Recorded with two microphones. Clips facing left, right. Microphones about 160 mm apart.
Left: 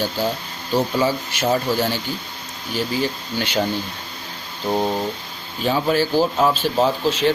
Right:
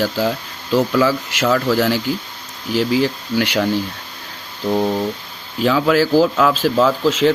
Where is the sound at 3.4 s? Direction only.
75° right (ahead or behind).